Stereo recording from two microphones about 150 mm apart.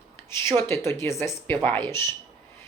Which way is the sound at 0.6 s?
20° left (ahead or behind).